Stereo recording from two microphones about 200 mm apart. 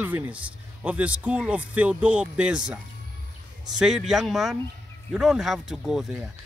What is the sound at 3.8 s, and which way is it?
Speech, centre (ahead or behind).